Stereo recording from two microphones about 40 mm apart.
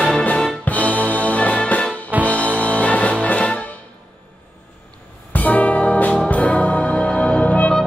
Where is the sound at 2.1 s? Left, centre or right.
Right.